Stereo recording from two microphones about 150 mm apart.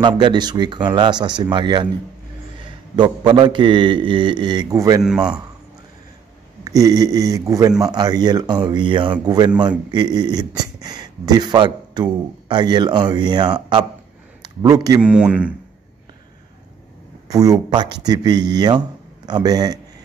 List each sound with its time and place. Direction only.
0.0 s a man's voice: 30° right (ahead or behind)
3.0 s a man's voice: 30° right (ahead or behind)
5.0 s a man's voice: 5° right (ahead or behind)
6.6 s a man's voice: 25° right (ahead or behind)
15.0 s speech: 5° right (ahead or behind)
17.3 s speech: 25° right (ahead or behind)